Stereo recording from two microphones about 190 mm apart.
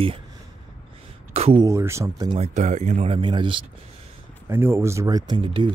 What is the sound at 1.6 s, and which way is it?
Speech, 15° right (ahead or behind).